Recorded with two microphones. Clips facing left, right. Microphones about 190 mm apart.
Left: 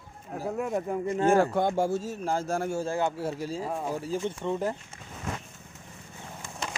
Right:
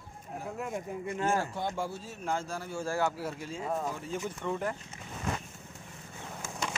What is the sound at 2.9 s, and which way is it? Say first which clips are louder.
Speech: left 3 dB; 20° left (ahead or behind).